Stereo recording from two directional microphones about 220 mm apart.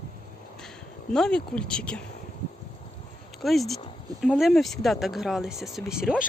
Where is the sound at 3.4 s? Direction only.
Centre (ahead or behind).